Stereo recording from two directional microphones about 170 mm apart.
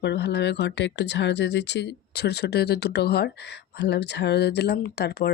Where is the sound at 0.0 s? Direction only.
80° left.